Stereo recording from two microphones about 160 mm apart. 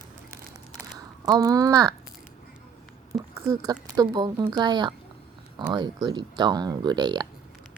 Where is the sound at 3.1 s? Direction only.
25° right (ahead or behind).